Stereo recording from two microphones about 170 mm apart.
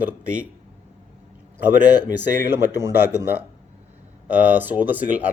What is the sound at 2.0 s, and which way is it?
A man's voice, 10° right (ahead or behind).